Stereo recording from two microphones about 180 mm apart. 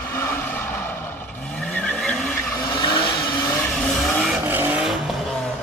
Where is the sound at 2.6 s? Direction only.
25° left (ahead or behind).